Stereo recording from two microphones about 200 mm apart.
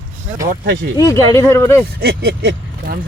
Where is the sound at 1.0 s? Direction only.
15° left (ahead or behind).